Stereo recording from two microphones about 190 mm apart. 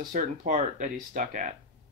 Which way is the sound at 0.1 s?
45° right (ahead or behind).